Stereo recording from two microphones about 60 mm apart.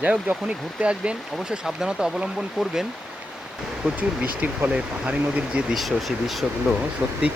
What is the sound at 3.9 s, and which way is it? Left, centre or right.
Speech, right.